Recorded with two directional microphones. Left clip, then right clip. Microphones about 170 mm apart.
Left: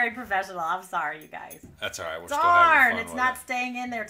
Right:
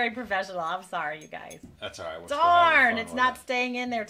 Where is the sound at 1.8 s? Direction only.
20° left (ahead or behind).